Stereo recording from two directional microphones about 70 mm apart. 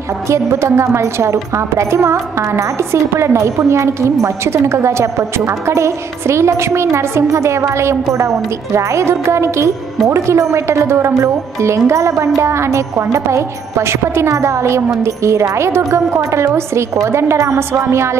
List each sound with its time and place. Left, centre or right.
0.3 s a woman's voice: right